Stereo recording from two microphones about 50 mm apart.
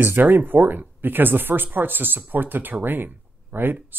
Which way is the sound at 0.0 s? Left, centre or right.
Right.